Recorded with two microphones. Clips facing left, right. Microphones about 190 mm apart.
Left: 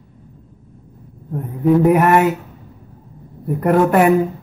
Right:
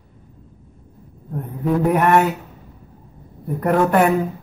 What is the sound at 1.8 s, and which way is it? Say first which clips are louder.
Speech: right 1 dB; 5° left (ahead or behind).